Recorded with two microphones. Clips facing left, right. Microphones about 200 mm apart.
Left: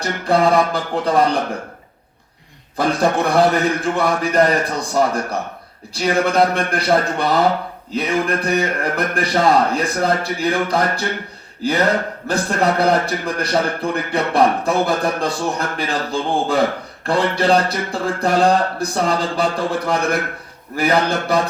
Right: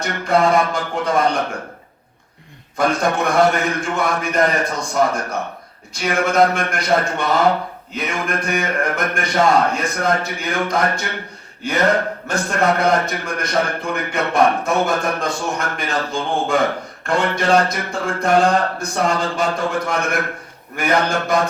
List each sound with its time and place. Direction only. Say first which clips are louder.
0.0 s a man's voice: left 1 dB; 35° left (ahead or behind)
2.7 s a man's voice: left 1 dB; 35° left (ahead or behind)
12.3 s a man's voice: left 1 dB; 35° left (ahead or behind)